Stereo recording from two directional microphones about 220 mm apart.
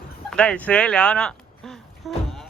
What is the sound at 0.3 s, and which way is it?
Speech, 5° left (ahead or behind).